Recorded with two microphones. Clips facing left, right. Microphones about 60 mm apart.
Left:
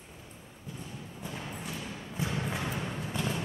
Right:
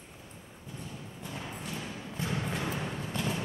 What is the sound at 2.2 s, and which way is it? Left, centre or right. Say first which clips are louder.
Music: even; centre.